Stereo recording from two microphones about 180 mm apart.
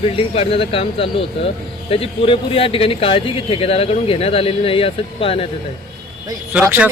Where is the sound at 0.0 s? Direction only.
30° left (ahead or behind).